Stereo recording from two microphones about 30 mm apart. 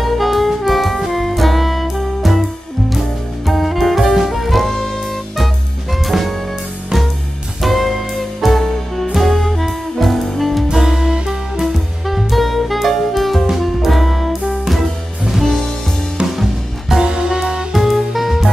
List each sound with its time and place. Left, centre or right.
0.0 s saxophone: centre
1.0 s music: centre
4.3 s saxophone: centre
6.0 s music: centre
7.6 s music: centre
10.7 s music: centre
11.6 s music: centre
17.0 s music: right
17.7 s music: centre